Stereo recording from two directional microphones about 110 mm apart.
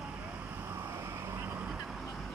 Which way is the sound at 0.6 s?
25° right (ahead or behind).